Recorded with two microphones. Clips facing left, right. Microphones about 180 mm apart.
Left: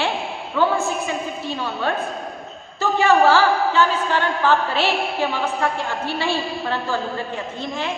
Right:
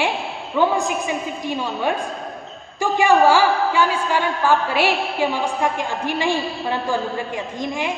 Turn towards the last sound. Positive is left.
turn(degrees=-15)  # may be behind; listen again after turning